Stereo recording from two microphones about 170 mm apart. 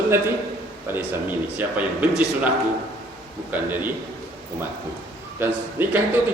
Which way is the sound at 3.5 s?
10° right (ahead or behind).